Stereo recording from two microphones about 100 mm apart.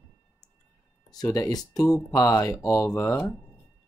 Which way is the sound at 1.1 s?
40° left (ahead or behind).